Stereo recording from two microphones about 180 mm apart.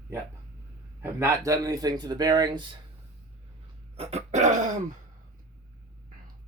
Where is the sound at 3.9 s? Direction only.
35° right (ahead or behind).